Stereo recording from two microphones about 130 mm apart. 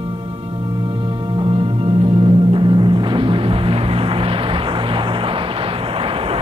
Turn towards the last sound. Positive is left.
turn(degrees=-45)  # may be behind; listen again after turning